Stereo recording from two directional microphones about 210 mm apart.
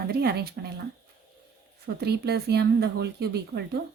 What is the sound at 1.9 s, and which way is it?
Speech, 50° right (ahead or behind).